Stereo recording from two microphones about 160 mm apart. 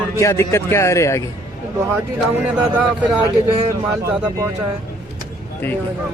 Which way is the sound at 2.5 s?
10° right (ahead or behind).